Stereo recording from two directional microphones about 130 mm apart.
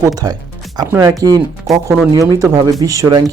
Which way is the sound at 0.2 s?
30° right (ahead or behind).